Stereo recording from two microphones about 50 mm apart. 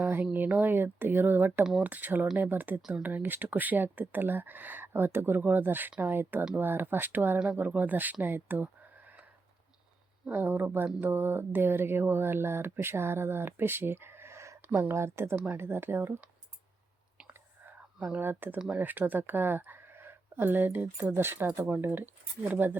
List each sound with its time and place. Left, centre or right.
0.0 s a sound: right
0.5 s speech: right
10.2 s speech: right
14.9 s speech: right
18.2 s speech: right
20.4 s speech: right